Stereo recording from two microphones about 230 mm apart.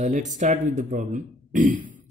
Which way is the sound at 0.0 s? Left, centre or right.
Right.